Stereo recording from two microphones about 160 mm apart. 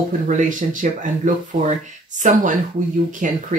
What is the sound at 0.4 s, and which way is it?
Speech, 55° right (ahead or behind).